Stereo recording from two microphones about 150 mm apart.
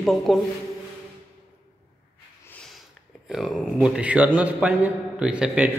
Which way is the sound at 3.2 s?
5° right (ahead or behind).